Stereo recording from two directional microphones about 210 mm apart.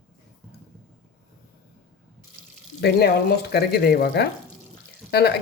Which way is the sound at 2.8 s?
50° left (ahead or behind).